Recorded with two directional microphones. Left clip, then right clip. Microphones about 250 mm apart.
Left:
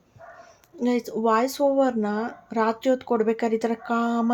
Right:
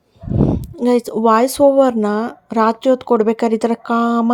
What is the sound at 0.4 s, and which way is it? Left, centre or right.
Speech, right.